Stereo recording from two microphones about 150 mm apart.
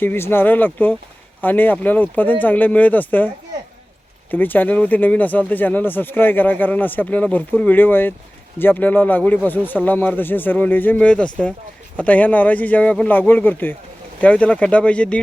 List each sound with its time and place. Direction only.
0.0 s speech: 15° left (ahead or behind)
4.3 s speech: 10° left (ahead or behind)